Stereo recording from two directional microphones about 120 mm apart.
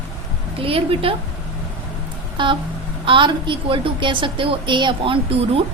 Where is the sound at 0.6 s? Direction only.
50° right (ahead or behind).